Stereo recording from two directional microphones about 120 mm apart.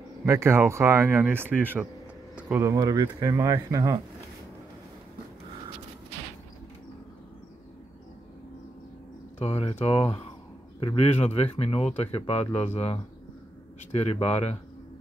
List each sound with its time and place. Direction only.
0.2 s speech: 25° right (ahead or behind)
2.6 s speech: 30° right (ahead or behind)
9.4 s a man's voice: 55° left (ahead or behind)
11.1 s speech: 60° left (ahead or behind)
14.2 s speech: 65° left (ahead or behind)